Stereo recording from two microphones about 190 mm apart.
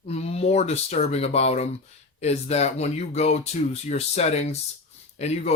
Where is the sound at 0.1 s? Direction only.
35° left (ahead or behind).